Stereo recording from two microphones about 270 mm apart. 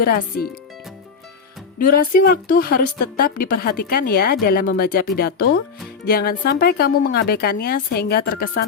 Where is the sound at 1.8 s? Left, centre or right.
Left.